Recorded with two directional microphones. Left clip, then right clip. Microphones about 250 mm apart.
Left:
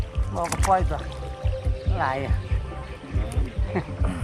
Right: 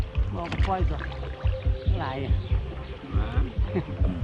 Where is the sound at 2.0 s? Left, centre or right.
Centre.